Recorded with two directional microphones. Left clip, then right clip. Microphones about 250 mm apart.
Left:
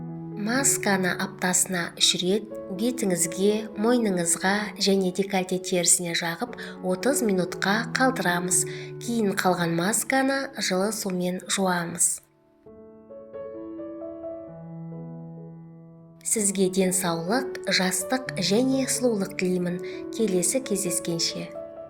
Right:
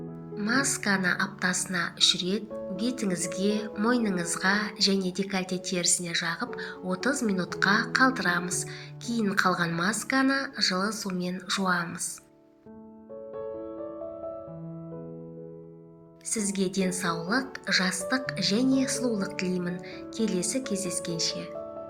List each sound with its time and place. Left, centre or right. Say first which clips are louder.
0.3 s a woman's voice: left 1 dB; left
16.3 s a woman's voice: left 6 dB; left